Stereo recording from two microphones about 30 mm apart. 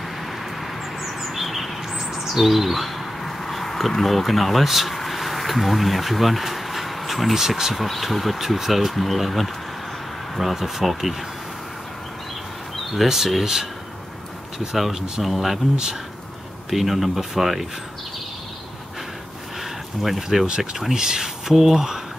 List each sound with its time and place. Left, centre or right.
1.0 s bird: centre
2.1 s chirp: centre
3.3 s a sound: centre
3.9 s speech: centre
4.9 s bee: centre
7.3 s speech: centre
7.7 s speech: centre
10.5 s speech: centre
12.9 s speech: centre
14.8 s speech: centre
16.7 s speech: centre
20.0 s speech: centre
20.9 s speech: right
21.5 s speech: centre